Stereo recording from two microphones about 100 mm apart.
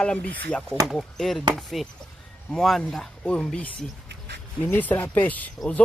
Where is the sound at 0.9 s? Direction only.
Centre (ahead or behind).